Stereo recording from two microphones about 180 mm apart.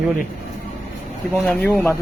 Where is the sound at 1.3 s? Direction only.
5° left (ahead or behind).